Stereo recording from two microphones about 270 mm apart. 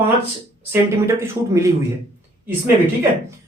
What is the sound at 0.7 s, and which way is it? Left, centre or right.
Speech, centre.